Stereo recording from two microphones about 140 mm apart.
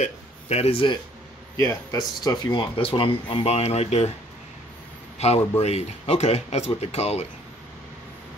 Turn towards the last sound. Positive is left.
turn(degrees=50)  # may be behind; listen again after turning